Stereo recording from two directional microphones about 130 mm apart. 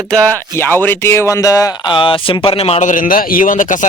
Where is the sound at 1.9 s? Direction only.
40° left (ahead or behind).